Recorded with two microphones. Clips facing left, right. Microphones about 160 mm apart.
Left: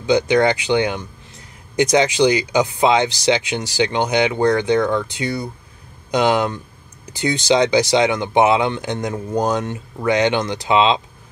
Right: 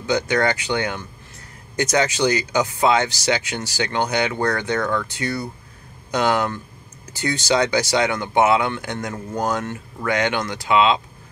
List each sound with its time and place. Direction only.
0.0 s speech: 20° left (ahead or behind)